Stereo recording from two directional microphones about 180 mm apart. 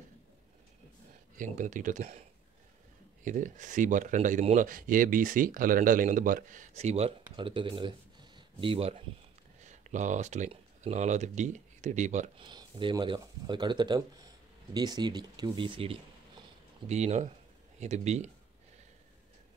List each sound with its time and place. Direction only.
1.3 s speech: 45° right (ahead or behind)
3.3 s speech: 45° right (ahead or behind)
9.6 s speech: 40° right (ahead or behind)
12.4 s speech: 25° right (ahead or behind)